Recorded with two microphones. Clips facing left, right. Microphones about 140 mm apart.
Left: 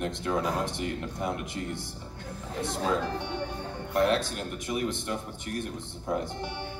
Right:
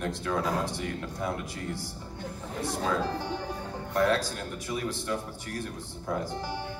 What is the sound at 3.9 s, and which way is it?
Speech, 20° left (ahead or behind).